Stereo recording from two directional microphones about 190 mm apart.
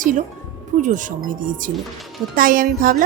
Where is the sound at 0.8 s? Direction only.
40° right (ahead or behind).